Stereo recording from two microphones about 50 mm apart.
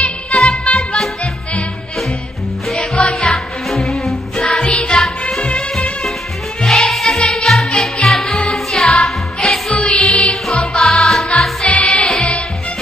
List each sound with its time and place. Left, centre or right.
0.4 s music: centre
0.9 s music: centre
2.7 s music: centre
3.0 s music: left
3.6 s music: centre
4.5 s music: centre
5.4 s music of bollywood: centre
6.6 s music: centre
9.8 s music: centre
10.3 s music: centre
11.7 s music: left